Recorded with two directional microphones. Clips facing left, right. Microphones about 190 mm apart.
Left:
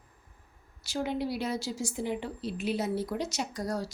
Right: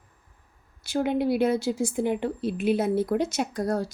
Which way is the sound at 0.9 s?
55° right (ahead or behind).